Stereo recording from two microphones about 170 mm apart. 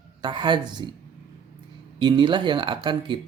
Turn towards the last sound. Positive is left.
turn(degrees=-30)  # may be behind; listen again after turning